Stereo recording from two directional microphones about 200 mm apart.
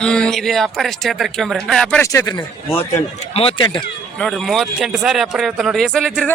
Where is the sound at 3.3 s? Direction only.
25° left (ahead or behind).